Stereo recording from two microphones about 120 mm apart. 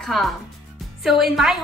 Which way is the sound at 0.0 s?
Centre (ahead or behind).